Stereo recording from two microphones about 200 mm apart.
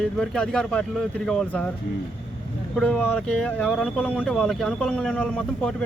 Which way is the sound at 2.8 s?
5° left (ahead or behind).